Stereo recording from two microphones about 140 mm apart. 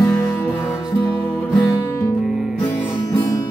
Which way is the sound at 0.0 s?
20° left (ahead or behind).